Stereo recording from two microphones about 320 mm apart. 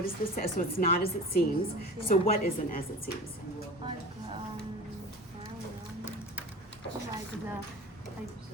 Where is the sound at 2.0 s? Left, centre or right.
Left.